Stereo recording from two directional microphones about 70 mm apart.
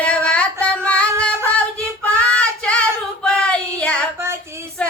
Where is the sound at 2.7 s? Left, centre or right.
Centre.